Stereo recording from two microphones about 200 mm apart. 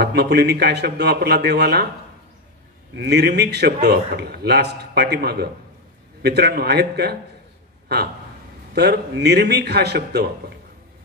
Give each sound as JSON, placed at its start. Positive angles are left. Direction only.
{"t": 0.0, "sound": "a man's voice", "side_deg": -55}
{"t": 3.0, "sound": "a man's voice", "side_deg": -55}
{"t": 8.7, "sound": "a man's voice", "side_deg": -55}